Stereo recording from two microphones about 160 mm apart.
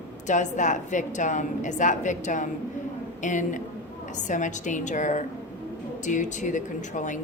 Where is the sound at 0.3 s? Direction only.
50° left (ahead or behind).